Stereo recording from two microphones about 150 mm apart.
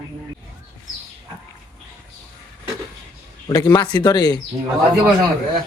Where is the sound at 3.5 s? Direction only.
25° left (ahead or behind).